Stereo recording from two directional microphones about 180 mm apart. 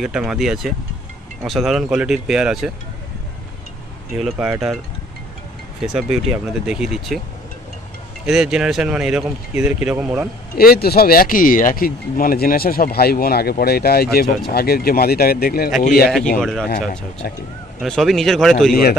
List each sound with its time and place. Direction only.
0.0 s speech: 5° right (ahead or behind)
4.2 s speech: centre (ahead or behind)
5.8 s speech: 5° right (ahead or behind)
8.3 s speech: 5° right (ahead or behind)
10.5 s speech: 55° left (ahead or behind)
16.3 s speech: 5° left (ahead or behind)
17.2 s speech: 60° left (ahead or behind)
17.8 s speech: centre (ahead or behind)
18.7 s speech: 55° left (ahead or behind)